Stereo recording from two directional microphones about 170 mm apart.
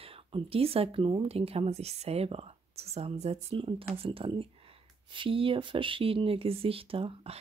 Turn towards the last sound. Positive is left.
turn(degrees=-35)  # may be behind; listen again after turning